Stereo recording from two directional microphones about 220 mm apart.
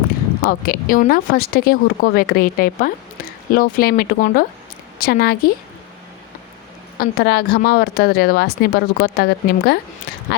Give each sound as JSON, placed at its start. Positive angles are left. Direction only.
{"t": 0.4, "sound": "speech", "side_deg": 40}
{"t": 7.0, "sound": "speech", "side_deg": 45}